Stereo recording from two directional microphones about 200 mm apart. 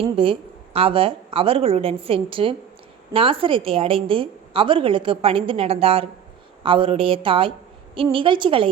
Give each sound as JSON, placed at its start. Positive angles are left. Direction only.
{"t": 0.0, "sound": "a woman's voice", "side_deg": -25}